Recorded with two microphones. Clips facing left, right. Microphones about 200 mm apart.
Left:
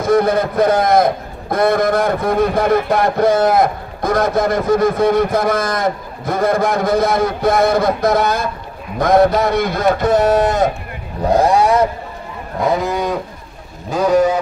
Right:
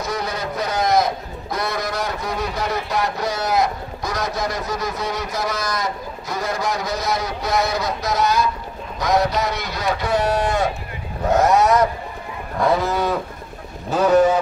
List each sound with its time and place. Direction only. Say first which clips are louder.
0.0 s a man's voice: left 12 dB; 50° left (ahead or behind)
11.2 s speech: left 3 dB; 30° left (ahead or behind)
12.6 s cattle: left 2 dB; 15° left (ahead or behind)